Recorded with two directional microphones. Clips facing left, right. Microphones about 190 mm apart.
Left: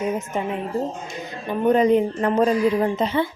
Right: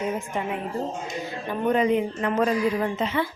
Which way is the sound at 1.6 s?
35° left (ahead or behind).